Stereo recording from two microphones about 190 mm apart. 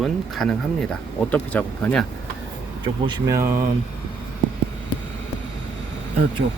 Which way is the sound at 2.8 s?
20° right (ahead or behind).